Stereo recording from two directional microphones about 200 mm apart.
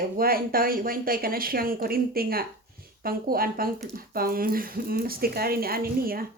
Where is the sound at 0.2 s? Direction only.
45° right (ahead or behind).